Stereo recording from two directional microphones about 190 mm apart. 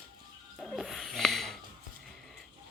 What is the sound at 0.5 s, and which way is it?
Wheeze, centre (ahead or behind).